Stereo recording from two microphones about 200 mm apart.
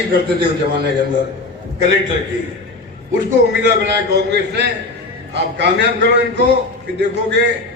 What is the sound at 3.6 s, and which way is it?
A man's voice, 55° right (ahead or behind).